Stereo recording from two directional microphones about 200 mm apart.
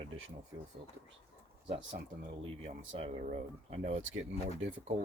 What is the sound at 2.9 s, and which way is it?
Speech, 30° right (ahead or behind).